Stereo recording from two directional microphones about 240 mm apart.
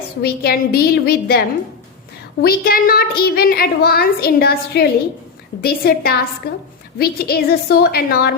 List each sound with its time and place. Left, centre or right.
0.2 s a woman's voice: left